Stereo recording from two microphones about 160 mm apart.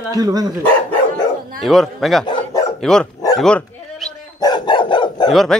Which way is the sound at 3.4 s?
5° left (ahead or behind).